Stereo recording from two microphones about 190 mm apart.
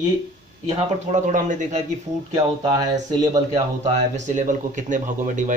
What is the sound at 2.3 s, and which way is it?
Speech, 20° right (ahead or behind).